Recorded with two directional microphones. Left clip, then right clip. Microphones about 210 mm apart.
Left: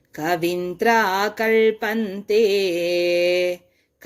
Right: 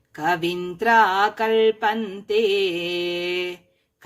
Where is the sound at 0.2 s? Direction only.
10° left (ahead or behind).